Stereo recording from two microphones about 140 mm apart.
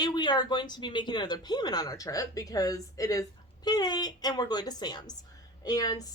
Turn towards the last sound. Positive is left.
turn(degrees=25)  # may be behind; listen again after turning